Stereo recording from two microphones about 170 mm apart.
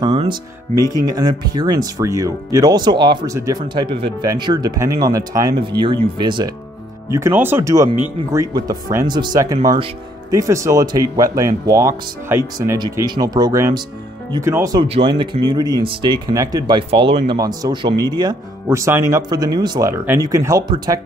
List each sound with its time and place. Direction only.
0.1 s speech: 35° right (ahead or behind)
0.7 s speech: 20° right (ahead or behind)
14.9 s speech: 30° right (ahead or behind)
17.4 s speech: 20° right (ahead or behind)